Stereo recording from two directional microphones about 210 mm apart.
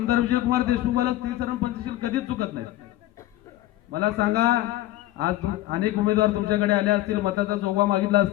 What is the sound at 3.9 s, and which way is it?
A man's voice, 50° right (ahead or behind).